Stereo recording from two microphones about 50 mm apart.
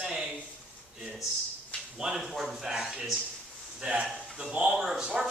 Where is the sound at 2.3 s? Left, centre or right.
Centre.